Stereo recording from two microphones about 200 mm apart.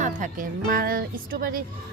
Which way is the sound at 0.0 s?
40° right (ahead or behind).